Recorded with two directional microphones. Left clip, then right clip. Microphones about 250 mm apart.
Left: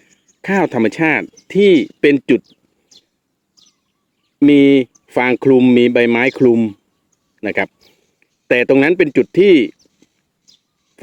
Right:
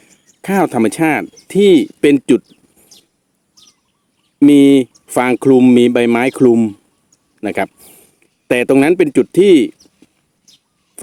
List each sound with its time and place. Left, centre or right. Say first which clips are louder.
0.0 s speech: left 1 dB; centre
2.4 s a sound: right 2 dB; centre
4.4 s speech: right 1 dB; centre